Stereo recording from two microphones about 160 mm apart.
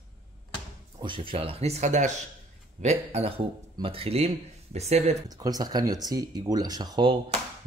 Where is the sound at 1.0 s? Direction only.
30° right (ahead or behind).